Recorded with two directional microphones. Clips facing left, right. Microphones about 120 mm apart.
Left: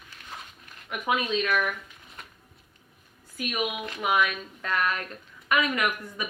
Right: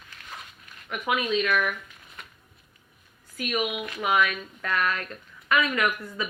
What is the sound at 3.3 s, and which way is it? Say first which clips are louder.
Speech: right 2 dB; 15° left (ahead or behind).